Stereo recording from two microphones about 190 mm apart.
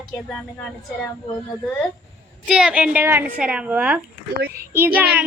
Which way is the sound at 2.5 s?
5° right (ahead or behind).